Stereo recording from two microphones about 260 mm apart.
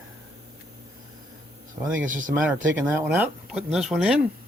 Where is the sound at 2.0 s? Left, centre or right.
Right.